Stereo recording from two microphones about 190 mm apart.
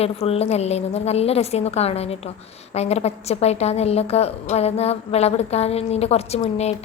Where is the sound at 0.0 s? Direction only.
30° left (ahead or behind).